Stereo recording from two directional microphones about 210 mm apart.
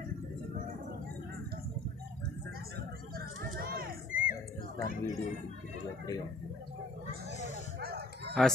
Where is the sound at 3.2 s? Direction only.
45° right (ahead or behind).